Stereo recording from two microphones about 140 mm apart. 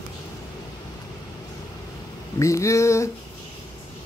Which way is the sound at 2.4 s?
20° left (ahead or behind).